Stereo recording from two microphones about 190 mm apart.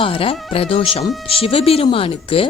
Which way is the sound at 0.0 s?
30° left (ahead or behind).